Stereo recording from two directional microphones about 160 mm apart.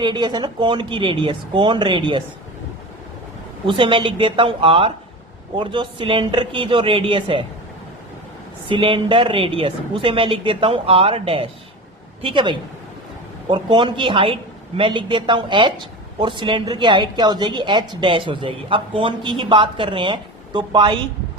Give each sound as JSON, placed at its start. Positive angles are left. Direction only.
{"t": 0.0, "sound": "speech", "side_deg": -25}
{"t": 3.7, "sound": "a woman's voice", "side_deg": -30}
{"t": 8.7, "sound": "a woman's voice", "side_deg": -30}